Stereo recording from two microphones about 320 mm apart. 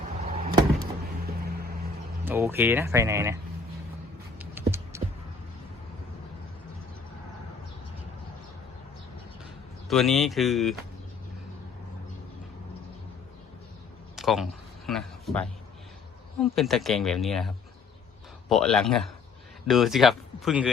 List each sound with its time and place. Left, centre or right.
0.2 s vehicle: centre
2.2 s speech: centre
4.4 s a sound: centre
9.9 s speech: centre
14.2 s a sound: centre
14.8 s a man's voice: centre